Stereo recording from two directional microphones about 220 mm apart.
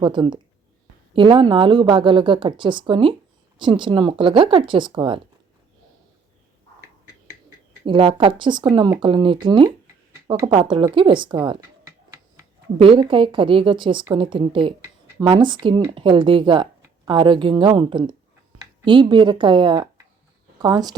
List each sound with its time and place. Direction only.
0.0 s speech: 20° right (ahead or behind)
7.9 s speech: 25° right (ahead or behind)